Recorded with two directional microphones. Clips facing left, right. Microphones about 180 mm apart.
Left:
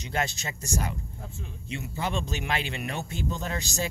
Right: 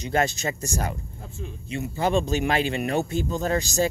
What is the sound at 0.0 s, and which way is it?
Speech, 45° right (ahead or behind).